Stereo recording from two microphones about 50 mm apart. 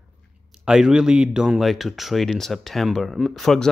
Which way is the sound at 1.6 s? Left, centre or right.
Centre.